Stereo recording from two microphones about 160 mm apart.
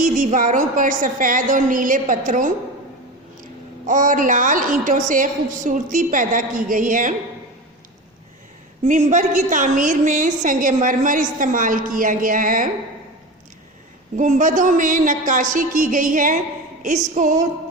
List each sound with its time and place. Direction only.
0.0 s a woman's voice: 50° right (ahead or behind)
3.8 s a woman's voice: 55° right (ahead or behind)
8.9 s a woman's voice: 50° right (ahead or behind)
14.2 s a woman's voice: 55° right (ahead or behind)
17.2 s music: 50° right (ahead or behind)